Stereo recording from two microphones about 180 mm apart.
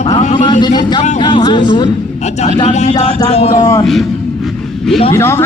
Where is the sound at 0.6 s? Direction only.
25° left (ahead or behind).